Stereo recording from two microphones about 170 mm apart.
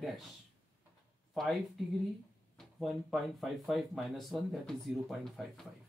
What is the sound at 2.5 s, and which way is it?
Speech, centre (ahead or behind).